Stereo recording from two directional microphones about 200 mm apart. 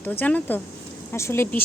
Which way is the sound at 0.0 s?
10° left (ahead or behind).